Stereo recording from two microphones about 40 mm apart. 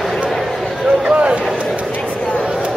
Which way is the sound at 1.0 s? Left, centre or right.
Right.